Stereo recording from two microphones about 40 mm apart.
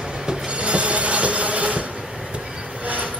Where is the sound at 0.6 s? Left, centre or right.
Right.